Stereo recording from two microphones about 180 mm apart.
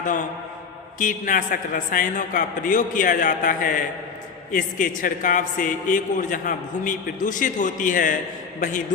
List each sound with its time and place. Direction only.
0.0 s a man's voice: 45° left (ahead or behind)